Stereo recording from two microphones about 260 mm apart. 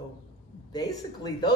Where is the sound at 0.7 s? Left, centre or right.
Centre.